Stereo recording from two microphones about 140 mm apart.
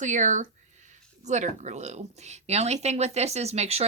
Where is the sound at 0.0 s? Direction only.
60° right (ahead or behind).